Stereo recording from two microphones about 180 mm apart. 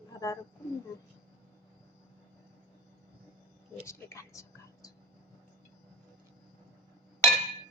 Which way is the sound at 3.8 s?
15° left (ahead or behind).